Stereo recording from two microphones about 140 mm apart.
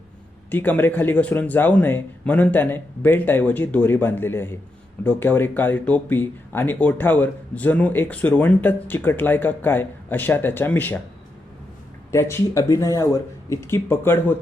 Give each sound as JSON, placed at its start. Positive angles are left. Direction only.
{"t": 0.5, "sound": "speech", "side_deg": 10}
{"t": 12.1, "sound": "speech", "side_deg": 20}